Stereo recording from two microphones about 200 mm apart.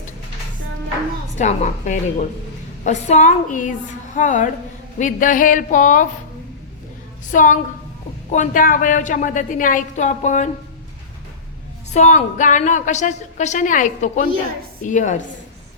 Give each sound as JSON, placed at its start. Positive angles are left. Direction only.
{"t": 1.4, "sound": "a woman's voice", "side_deg": 35}
{"t": 7.3, "sound": "a woman's voice", "side_deg": 40}
{"t": 11.9, "sound": "a woman's voice", "side_deg": 35}